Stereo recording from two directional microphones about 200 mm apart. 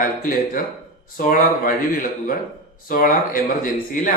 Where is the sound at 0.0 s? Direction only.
45° left (ahead or behind).